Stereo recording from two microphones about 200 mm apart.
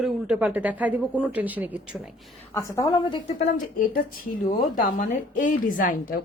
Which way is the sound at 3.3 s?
45° left (ahead or behind).